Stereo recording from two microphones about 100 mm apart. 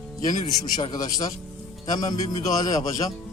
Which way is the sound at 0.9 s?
40° left (ahead or behind).